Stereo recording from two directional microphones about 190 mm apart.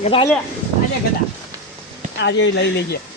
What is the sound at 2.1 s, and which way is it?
Speech, 75° left (ahead or behind).